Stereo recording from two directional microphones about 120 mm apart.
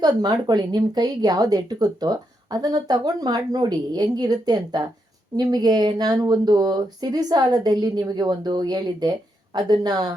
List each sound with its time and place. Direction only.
0.0 s speech: 35° right (ahead or behind)